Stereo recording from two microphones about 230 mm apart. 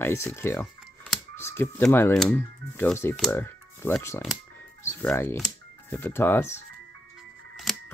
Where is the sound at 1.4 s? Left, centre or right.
Centre.